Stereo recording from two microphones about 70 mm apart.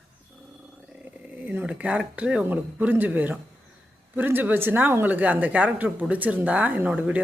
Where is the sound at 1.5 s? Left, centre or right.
Right.